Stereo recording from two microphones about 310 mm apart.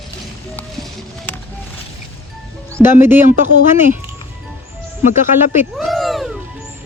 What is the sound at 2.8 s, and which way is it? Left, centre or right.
Speech, centre.